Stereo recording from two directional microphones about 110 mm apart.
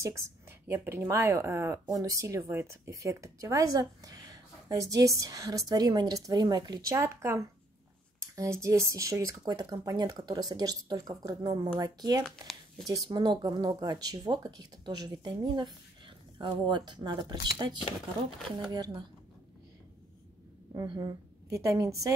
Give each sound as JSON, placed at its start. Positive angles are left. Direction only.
{"t": 0.0, "sound": "speech", "side_deg": -20}
{"t": 7.0, "sound": "a woman's voice", "side_deg": -25}
{"t": 12.2, "sound": "speech", "side_deg": 5}
{"t": 12.8, "sound": "speech", "side_deg": -35}
{"t": 20.8, "sound": "speech", "side_deg": -45}
{"t": 21.5, "sound": "a woman's voice", "side_deg": -30}